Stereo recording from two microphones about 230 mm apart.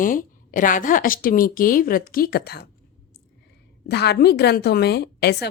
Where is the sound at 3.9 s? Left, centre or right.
Left.